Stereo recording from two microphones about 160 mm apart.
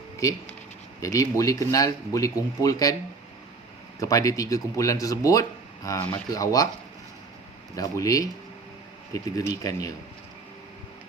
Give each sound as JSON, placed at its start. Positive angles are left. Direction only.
{"t": 1.0, "sound": "speech", "side_deg": 20}
{"t": 4.0, "sound": "speech", "side_deg": 20}
{"t": 7.8, "sound": "speech", "side_deg": 20}